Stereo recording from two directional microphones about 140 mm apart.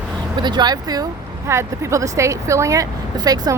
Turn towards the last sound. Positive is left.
turn(degrees=-25)  # may be behind; listen again after turning